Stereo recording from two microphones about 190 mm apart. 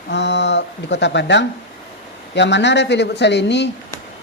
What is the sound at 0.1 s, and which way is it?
Speech, 65° left (ahead or behind).